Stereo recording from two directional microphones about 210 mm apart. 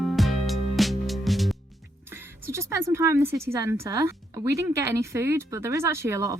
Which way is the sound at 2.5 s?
15° right (ahead or behind).